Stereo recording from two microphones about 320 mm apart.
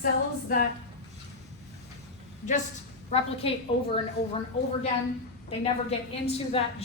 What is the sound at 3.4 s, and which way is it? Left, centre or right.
Speech, centre.